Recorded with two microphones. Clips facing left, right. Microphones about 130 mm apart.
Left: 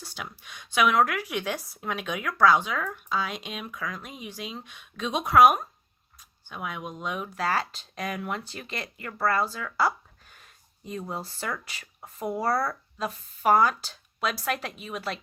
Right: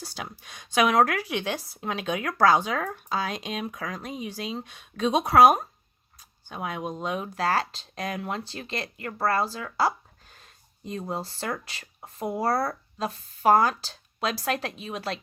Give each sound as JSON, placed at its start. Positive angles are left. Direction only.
{"t": 0.0, "sound": "speech", "side_deg": -35}
{"t": 11.1, "sound": "speech", "side_deg": -35}